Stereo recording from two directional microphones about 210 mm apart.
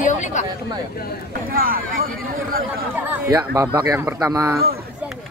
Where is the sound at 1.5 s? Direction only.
45° right (ahead or behind).